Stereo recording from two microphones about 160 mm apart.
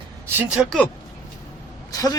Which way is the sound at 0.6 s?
10° left (ahead or behind).